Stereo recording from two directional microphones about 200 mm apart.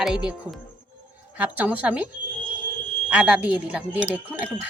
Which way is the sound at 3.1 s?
5° right (ahead or behind).